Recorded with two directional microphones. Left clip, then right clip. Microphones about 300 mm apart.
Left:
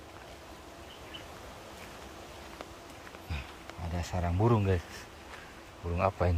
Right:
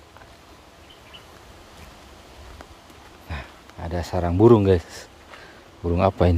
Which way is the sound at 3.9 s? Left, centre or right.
Centre.